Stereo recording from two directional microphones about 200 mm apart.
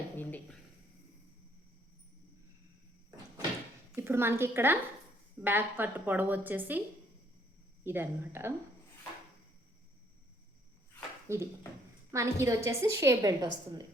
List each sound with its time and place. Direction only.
0.2 s a sound: 10° left (ahead or behind)
3.9 s a woman's voice: 10° right (ahead or behind)
7.9 s a woman's voice: 10° right (ahead or behind)
11.3 s a woman's voice: 15° right (ahead or behind)